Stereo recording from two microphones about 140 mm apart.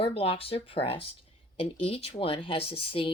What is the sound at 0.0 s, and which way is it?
Speech, 45° left (ahead or behind).